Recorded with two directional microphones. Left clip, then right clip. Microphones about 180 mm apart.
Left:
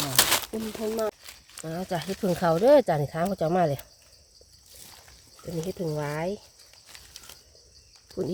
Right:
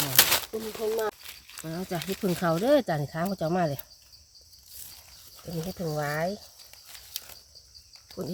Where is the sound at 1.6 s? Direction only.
50° left (ahead or behind).